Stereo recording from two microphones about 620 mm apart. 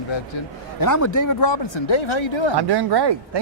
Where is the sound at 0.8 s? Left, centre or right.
Left.